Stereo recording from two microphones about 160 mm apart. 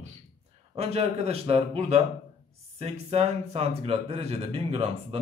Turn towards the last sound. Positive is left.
turn(degrees=-35)  # may be behind; listen again after turning